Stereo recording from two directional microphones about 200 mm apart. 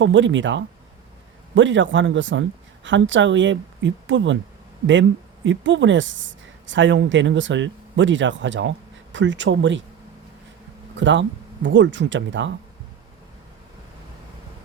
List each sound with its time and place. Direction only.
0.0 s a woman's voice: 65° right (ahead or behind)
5.5 s a woman's voice: 65° right (ahead or behind)
10.9 s speech: 65° right (ahead or behind)